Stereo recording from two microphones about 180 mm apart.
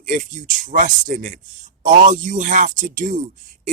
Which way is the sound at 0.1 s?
45° right (ahead or behind).